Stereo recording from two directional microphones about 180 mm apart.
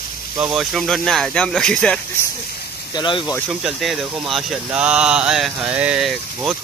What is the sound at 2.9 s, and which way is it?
Speech, 25° left (ahead or behind).